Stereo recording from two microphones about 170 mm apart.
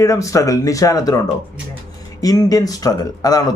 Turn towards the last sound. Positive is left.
turn(degrees=20)  # may be behind; listen again after turning